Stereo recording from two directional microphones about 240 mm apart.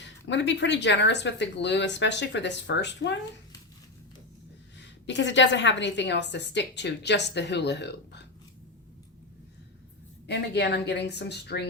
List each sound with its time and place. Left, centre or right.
0.0 s a woman's voice: left
4.8 s a woman's voice: left
10.2 s a woman's voice: left